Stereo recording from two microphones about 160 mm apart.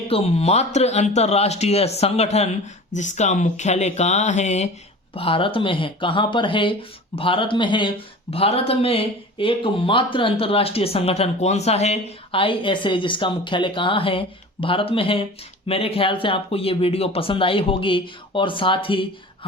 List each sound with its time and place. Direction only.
0.1 s speech: 40° left (ahead or behind)
5.1 s speech: 35° left (ahead or behind)